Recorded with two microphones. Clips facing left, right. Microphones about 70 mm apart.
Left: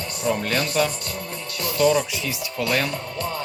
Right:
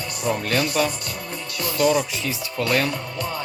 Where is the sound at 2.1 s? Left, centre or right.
Right.